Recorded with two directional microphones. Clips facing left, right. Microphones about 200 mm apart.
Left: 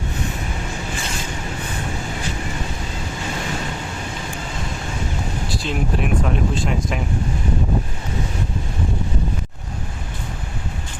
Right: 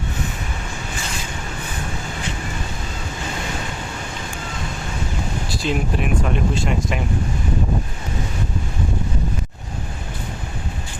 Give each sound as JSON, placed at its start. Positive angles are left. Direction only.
{"t": 5.6, "sound": "speech", "side_deg": 0}